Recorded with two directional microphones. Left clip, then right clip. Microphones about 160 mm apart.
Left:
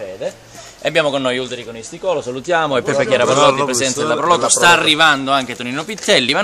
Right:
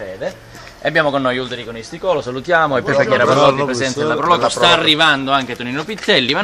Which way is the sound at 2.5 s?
45° left (ahead or behind).